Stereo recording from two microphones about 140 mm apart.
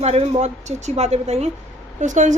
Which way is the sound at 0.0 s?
45° right (ahead or behind).